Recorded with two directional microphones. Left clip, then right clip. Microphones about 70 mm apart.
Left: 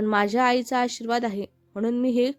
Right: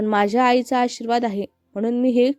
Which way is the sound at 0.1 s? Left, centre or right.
Right.